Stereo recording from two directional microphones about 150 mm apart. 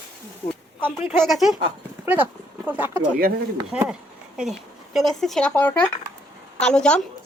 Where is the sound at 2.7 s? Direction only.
10° right (ahead or behind).